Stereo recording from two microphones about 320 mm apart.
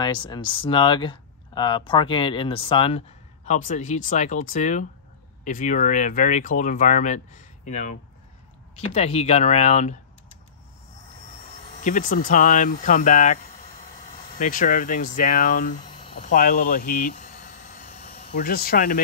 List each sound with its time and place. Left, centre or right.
0.0 s speech: centre
8.9 s speech: centre
11.8 s speech: left
14.4 s speech: left
17.6 s a sound: left